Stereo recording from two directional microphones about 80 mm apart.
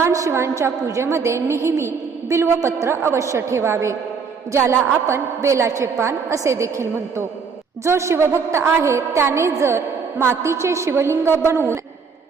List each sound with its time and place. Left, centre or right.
0.0 s a woman's voice: right
7.9 s a woman's voice: right